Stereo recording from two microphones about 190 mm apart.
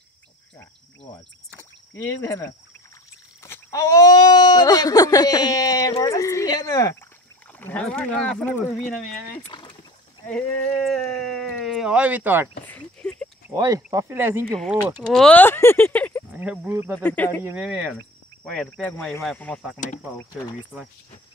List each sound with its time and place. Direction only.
1.6 s a sound: 10° left (ahead or behind)
3.4 s speech: 15° left (ahead or behind)
9.5 s speech: 25° left (ahead or behind)
10.2 s speech: 5° left (ahead or behind); by 12.4 s 10° right (ahead or behind)
12.6 s a sound: 5° left (ahead or behind)
13.6 s speech: 20° right (ahead or behind)
15.0 s speech: 5° left (ahead or behind)
16.3 s speech: 10° right (ahead or behind)
17.0 s speech: 10° left (ahead or behind)
17.4 s speech: 10° right (ahead or behind); by 19.6 s 5° left (ahead or behind)